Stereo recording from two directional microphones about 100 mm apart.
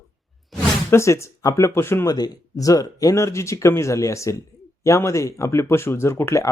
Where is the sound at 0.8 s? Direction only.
30° left (ahead or behind).